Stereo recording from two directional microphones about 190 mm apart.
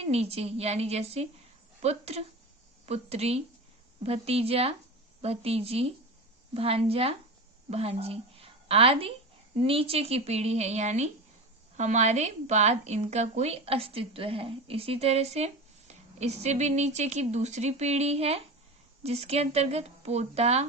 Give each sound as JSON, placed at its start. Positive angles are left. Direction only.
{"t": 0.0, "sound": "a woman's voice", "side_deg": -35}